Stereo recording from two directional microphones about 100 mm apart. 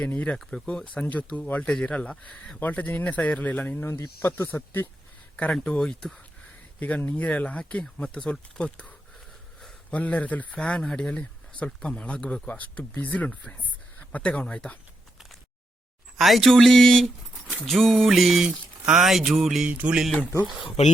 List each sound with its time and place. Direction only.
0.0 s speech: 10° left (ahead or behind)
5.5 s speech: 10° left (ahead or behind)
6.7 s speech: 15° left (ahead or behind)
16.1 s speech: centre (ahead or behind)
20.6 s speech: 65° left (ahead or behind)